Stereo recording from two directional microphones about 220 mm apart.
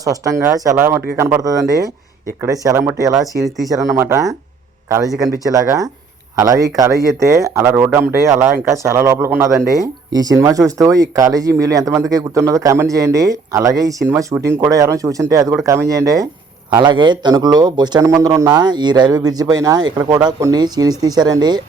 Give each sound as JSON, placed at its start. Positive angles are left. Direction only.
{"t": 0.0, "sound": "speech", "side_deg": -15}
{"t": 3.2, "sound": "speech", "side_deg": 0}
{"t": 3.7, "sound": "speech", "side_deg": -15}